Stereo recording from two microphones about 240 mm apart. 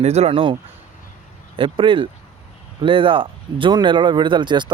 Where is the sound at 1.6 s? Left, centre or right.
Right.